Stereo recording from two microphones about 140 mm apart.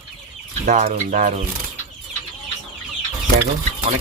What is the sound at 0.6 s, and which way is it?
Speech, 65° right (ahead or behind).